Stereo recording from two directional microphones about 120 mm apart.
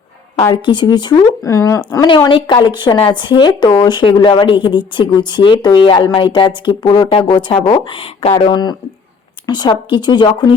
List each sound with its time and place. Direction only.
0.3 s a woman's voice: 35° left (ahead or behind)
1.5 s speech: 25° left (ahead or behind)
1.9 s a woman's voice: 40° left (ahead or behind)
8.4 s a woman's voice: 40° left (ahead or behind)